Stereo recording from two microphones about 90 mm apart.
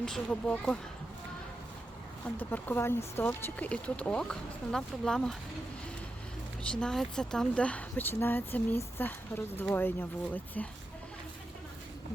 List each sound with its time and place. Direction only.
0.0 s speech: 10° left (ahead or behind)
2.2 s speech: 20° left (ahead or behind)
3.7 s speech: 15° left (ahead or behind)
6.7 s speech: 10° left (ahead or behind)